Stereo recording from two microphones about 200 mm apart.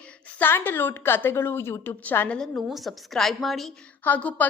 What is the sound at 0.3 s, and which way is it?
A woman's voice, 10° left (ahead or behind).